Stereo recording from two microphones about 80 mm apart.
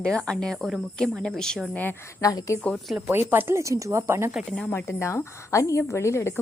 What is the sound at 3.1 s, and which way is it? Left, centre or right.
Speech, right.